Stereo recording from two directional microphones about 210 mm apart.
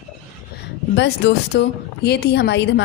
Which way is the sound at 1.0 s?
55° left (ahead or behind).